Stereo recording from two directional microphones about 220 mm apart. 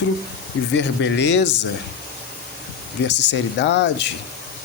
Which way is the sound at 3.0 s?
50° left (ahead or behind).